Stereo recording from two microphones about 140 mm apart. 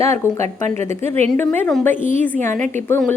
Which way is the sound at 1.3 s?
15° left (ahead or behind).